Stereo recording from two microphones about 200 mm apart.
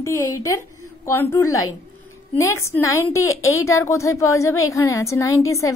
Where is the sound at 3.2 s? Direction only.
90° left.